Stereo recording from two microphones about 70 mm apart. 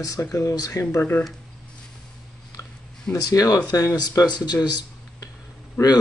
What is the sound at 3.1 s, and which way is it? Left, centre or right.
Speech, left.